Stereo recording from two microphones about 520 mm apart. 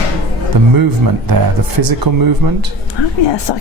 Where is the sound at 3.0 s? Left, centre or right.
Left.